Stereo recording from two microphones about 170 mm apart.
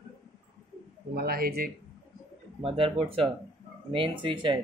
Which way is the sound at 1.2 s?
65° right (ahead or behind).